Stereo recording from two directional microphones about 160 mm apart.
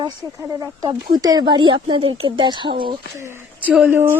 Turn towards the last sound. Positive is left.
turn(degrees=-15)  # may be behind; listen again after turning